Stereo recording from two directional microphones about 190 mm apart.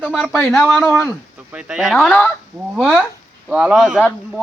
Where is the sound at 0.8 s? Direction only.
15° left (ahead or behind).